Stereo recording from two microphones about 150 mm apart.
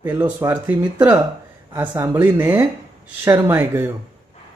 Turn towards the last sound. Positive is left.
turn(degrees=-15)  # may be behind; listen again after turning